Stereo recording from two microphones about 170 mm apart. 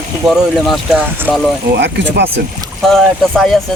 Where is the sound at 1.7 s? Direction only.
90° right.